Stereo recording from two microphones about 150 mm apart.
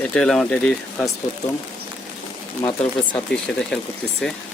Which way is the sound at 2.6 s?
40° left (ahead or behind).